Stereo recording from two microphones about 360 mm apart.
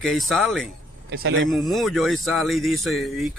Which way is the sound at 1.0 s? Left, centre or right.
Right.